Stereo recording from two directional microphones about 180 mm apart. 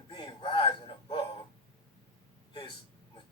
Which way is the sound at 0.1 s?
25° left (ahead or behind).